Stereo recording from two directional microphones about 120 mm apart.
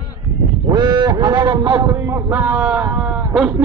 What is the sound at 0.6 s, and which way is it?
A man's voice, 35° right (ahead or behind).